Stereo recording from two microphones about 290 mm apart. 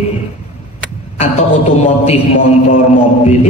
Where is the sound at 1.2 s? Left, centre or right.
Left.